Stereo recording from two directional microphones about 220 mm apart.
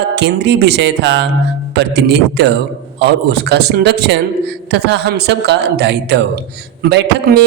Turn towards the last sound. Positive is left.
turn(degrees=-50)  # may be behind; listen again after turning